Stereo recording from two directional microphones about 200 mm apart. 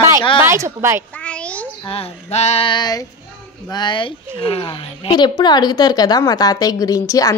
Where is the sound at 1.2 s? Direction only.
5° left (ahead or behind).